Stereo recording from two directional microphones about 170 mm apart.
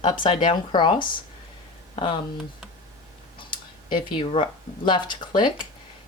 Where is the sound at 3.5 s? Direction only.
30° left (ahead or behind).